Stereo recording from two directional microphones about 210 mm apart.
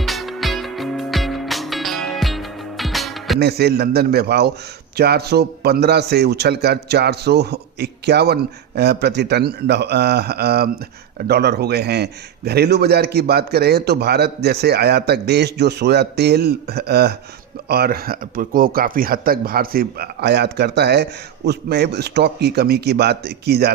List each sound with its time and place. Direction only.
0.0 s music: centre (ahead or behind)
3.4 s speech: 50° right (ahead or behind)